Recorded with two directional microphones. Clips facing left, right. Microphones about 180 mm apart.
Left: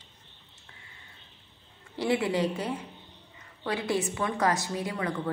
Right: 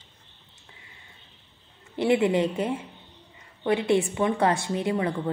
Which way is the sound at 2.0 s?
20° right (ahead or behind).